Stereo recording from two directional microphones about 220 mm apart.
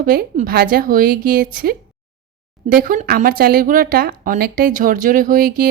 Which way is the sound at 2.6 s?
40° right (ahead or behind).